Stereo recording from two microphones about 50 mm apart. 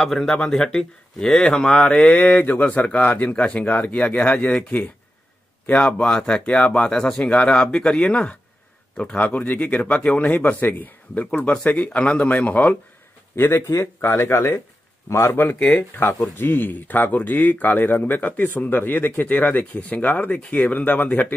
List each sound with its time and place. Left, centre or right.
0.0 s speech: centre; by 4.6 s left
5.7 s speech: left
7.2 s speech: left
10.4 s speech: left
11.3 s speech: centre
13.4 s a man's voice: left
13.7 s speech: left
16.1 s speech: left